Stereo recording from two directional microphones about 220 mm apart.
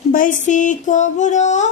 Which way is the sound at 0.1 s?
35° left (ahead or behind).